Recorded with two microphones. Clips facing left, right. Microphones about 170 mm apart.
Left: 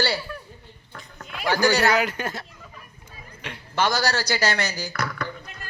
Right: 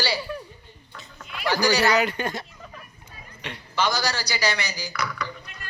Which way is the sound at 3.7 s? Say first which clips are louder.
Left 2 dB; 50° left (ahead or behind).